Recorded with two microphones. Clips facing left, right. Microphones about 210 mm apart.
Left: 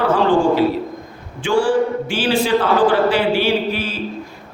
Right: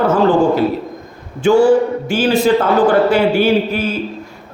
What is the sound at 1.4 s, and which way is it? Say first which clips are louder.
A man's voice: right 6 dB; 40° right (ahead or behind).